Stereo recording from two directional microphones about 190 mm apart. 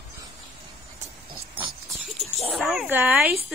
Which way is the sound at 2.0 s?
Centre (ahead or behind).